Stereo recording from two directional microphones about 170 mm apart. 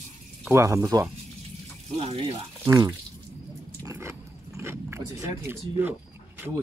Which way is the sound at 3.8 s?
15° right (ahead or behind).